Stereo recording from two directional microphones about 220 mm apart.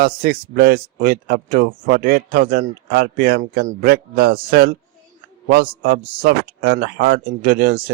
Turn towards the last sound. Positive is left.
turn(degrees=-40)  # may be behind; listen again after turning